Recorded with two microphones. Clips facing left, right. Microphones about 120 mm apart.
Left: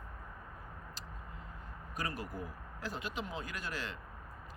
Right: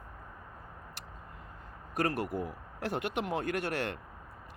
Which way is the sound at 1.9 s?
70° right (ahead or behind).